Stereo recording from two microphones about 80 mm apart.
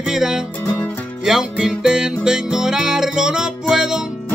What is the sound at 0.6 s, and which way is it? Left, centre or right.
Music, left.